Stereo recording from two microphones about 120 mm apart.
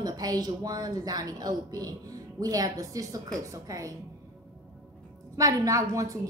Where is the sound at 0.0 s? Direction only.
35° right (ahead or behind).